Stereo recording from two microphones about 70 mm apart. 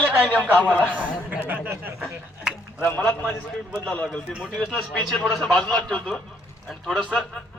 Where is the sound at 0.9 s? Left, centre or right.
Right.